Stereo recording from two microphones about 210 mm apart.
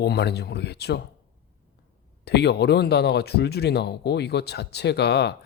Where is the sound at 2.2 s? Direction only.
50° left (ahead or behind).